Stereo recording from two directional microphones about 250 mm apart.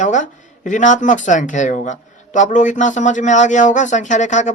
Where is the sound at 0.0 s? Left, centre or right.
Left.